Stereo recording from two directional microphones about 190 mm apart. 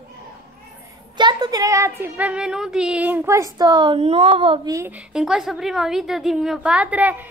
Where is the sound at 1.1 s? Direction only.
20° right (ahead or behind).